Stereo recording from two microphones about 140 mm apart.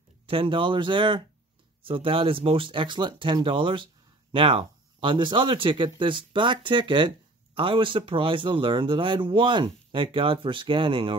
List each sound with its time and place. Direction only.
0.3 s speech: 35° right (ahead or behind)